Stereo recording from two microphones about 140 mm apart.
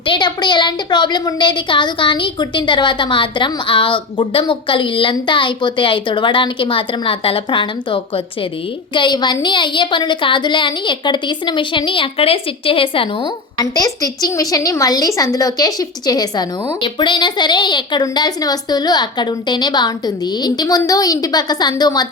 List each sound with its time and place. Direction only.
0.0 s speech: 35° left (ahead or behind)
13.6 s a woman's voice: 25° left (ahead or behind)